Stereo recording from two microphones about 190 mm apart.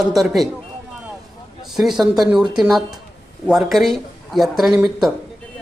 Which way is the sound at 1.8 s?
Centre (ahead or behind).